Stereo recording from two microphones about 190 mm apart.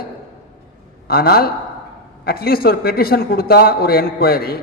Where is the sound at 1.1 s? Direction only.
55° left (ahead or behind).